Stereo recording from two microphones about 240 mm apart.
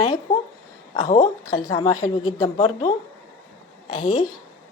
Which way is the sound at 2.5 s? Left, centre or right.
Left.